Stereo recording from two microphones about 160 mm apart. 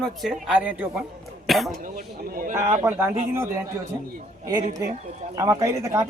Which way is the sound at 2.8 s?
20° right (ahead or behind).